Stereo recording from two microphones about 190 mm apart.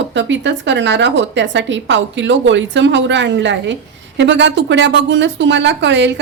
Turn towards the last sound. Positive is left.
turn(degrees=-70)  # may be behind; listen again after turning